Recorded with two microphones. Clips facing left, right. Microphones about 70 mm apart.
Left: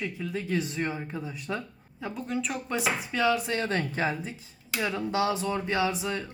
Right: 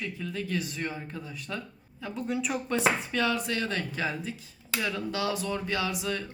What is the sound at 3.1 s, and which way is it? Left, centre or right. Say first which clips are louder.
Speech: left 3 dB; centre.